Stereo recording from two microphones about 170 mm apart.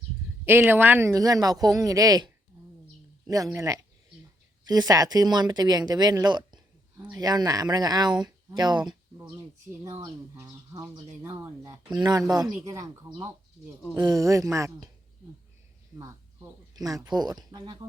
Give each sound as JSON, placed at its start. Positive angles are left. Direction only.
{"t": 0.4, "sound": "speech", "side_deg": -15}
{"t": 10.0, "sound": "speech", "side_deg": -20}
{"t": 16.0, "sound": "speech", "side_deg": -20}